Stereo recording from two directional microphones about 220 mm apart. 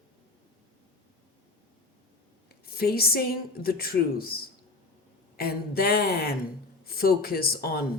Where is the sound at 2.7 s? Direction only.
45° left (ahead or behind).